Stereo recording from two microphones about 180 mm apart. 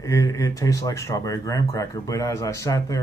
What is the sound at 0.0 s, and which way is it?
Speech, 20° left (ahead or behind).